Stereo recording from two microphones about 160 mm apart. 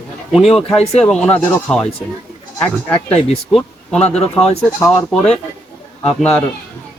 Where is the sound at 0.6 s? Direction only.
40° left (ahead or behind).